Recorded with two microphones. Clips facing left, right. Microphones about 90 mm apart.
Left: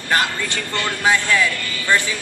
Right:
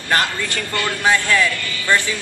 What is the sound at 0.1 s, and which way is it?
Speech, 15° left (ahead or behind).